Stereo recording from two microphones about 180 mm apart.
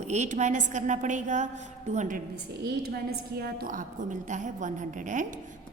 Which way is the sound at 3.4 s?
55° right (ahead or behind).